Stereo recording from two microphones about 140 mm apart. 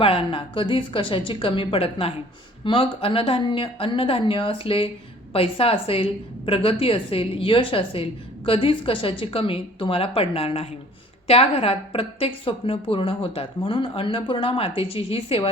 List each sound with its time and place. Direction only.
0.0 s a woman's voice: 40° left (ahead or behind)